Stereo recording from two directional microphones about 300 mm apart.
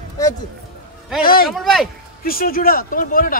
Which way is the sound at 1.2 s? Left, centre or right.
Left.